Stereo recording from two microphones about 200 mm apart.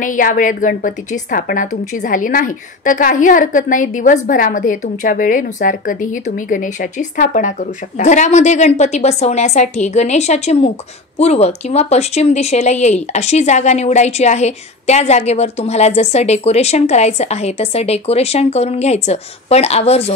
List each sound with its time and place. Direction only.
0.0 s a woman's voice: 40° left (ahead or behind)